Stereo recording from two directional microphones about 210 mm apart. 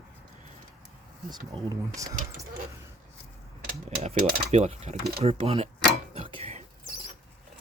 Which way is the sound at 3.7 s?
30° right (ahead or behind).